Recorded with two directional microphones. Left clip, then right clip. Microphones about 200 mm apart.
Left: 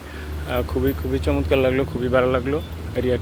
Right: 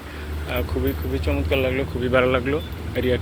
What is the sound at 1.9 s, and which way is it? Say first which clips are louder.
Speech: right 4 dB; 10° left (ahead or behind).